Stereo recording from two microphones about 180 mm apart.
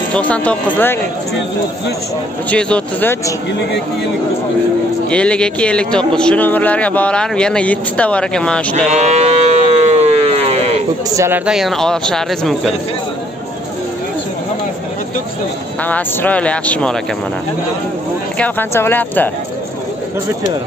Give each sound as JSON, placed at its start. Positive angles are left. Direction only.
{"t": 0.1, "sound": "speech", "side_deg": 5}
{"t": 2.5, "sound": "speech", "side_deg": 10}
{"t": 5.1, "sound": "a man's voice", "side_deg": 5}
{"t": 8.9, "sound": "a sound", "side_deg": -35}
{"t": 11.1, "sound": "a man's voice", "side_deg": -15}
{"t": 15.8, "sound": "speech", "side_deg": 10}
{"t": 18.4, "sound": "speech", "side_deg": 10}